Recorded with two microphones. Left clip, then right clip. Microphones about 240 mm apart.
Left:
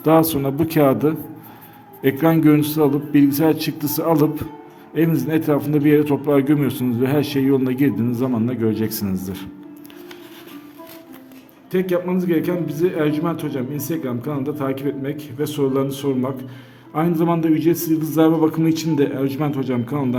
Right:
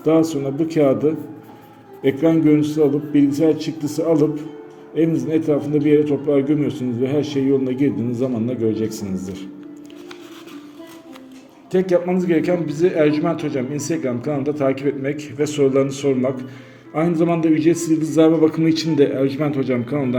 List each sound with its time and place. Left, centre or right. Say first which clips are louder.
0.0 s a man's voice: left 1 dB; left
11.7 s a man's voice: right 3 dB; centre